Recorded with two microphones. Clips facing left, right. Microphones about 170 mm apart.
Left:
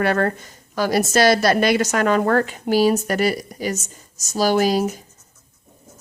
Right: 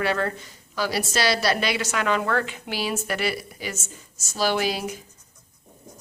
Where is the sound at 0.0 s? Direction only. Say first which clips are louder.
Left 5 dB; 50° left (ahead or behind).